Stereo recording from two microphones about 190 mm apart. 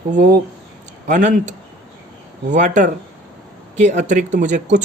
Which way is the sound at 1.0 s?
45° right (ahead or behind).